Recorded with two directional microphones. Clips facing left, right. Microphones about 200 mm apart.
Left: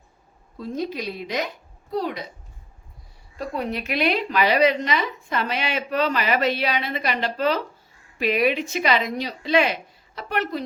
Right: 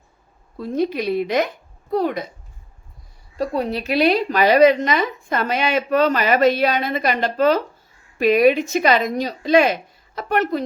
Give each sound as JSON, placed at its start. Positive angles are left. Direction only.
{"t": 0.5, "sound": "a woman's voice", "side_deg": -60}
{"t": 3.3, "sound": "a woman's voice", "side_deg": -35}